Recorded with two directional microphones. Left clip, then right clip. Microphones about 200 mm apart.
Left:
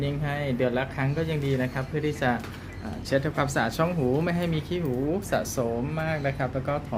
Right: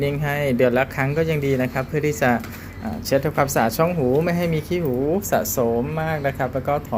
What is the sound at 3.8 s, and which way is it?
Speech, centre (ahead or behind).